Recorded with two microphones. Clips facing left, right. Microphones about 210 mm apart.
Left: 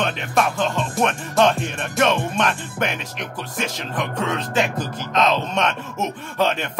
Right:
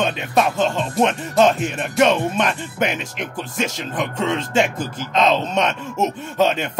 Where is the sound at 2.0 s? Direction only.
20° right (ahead or behind).